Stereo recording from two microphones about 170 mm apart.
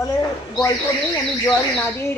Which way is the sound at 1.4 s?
10° left (ahead or behind).